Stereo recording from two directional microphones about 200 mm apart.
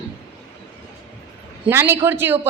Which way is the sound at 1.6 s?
10° right (ahead or behind).